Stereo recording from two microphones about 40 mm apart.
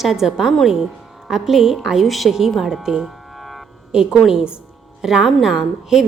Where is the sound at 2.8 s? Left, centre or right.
Centre.